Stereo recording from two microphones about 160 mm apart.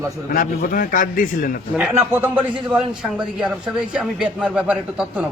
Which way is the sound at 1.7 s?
10° right (ahead or behind).